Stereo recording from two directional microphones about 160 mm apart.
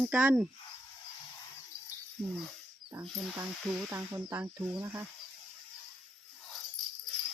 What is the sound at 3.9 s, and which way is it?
Speech, 15° right (ahead or behind).